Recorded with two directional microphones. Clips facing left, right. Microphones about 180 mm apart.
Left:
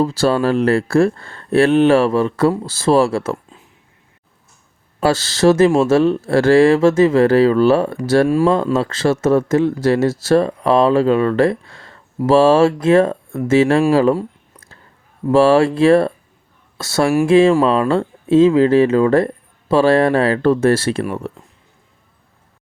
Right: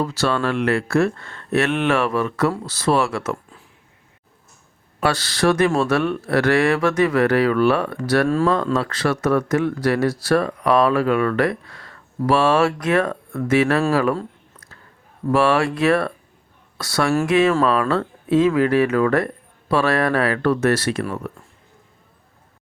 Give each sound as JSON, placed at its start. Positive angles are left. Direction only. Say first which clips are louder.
{"t": 0.0, "sound": "speech", "louder": "left 6 dB", "side_deg": 30}
{"t": 3.3, "sound": "a sound", "louder": "left 3 dB", "side_deg": 20}
{"t": 4.9, "sound": "speech", "louder": "left 5 dB", "side_deg": 25}
{"t": 15.3, "sound": "speech", "louder": "left 6 dB", "side_deg": 30}